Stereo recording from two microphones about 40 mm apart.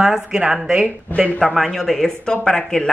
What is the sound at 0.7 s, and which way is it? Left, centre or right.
Speech, right.